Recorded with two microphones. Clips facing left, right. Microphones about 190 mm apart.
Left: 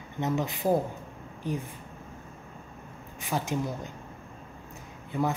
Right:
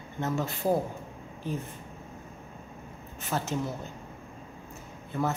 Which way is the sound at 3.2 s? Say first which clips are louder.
Left 1 dB; 10° left (ahead or behind).